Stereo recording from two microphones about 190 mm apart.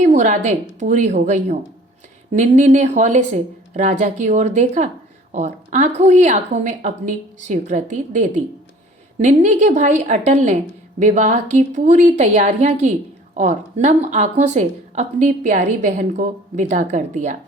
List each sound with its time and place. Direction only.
0.0 s speech: 40° right (ahead or behind)